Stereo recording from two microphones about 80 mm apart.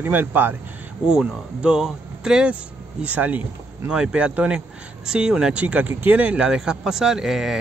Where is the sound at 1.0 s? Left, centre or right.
Centre.